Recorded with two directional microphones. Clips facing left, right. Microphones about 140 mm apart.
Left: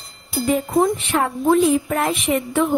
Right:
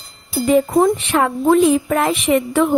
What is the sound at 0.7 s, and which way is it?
A woman's voice, 90° right.